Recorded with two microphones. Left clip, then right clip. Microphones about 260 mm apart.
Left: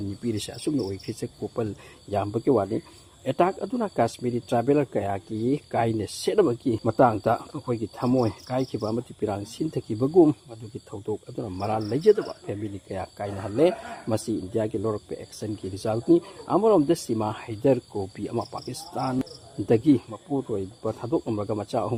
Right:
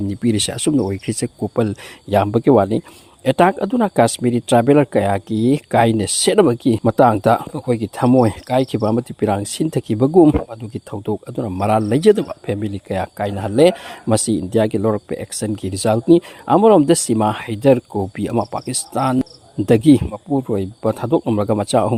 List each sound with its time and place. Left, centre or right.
0.2 s speech: right